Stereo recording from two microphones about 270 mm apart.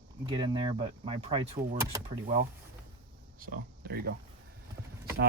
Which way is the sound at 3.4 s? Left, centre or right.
Right.